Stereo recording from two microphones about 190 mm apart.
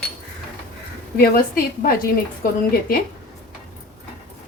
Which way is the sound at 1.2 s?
50° left (ahead or behind).